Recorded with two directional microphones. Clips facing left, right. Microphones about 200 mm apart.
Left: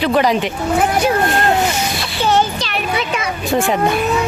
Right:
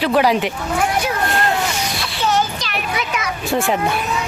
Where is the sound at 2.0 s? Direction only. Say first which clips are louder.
Left 3 dB; 30° left (ahead or behind).